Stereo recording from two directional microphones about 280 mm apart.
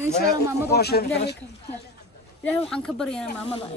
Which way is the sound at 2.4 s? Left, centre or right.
Centre.